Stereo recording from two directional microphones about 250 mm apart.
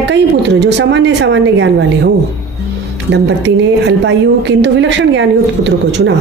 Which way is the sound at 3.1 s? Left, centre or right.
Right.